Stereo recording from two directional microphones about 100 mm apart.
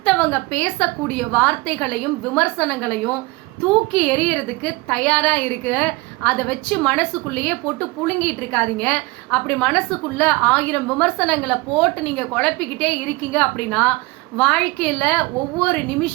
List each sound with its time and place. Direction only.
0.0 s a woman's voice: 15° left (ahead or behind)